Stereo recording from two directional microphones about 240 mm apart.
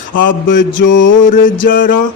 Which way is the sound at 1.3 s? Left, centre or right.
Left.